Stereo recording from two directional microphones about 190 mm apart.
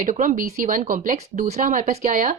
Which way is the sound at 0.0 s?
40° right (ahead or behind).